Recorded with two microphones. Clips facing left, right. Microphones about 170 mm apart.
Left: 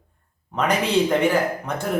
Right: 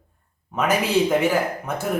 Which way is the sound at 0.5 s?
5° right (ahead or behind).